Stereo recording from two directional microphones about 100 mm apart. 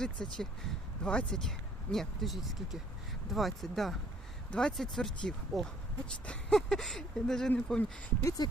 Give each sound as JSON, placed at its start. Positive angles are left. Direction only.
{"t": 0.0, "sound": "speech", "side_deg": 5}
{"t": 8.2, "sound": "speech", "side_deg": 35}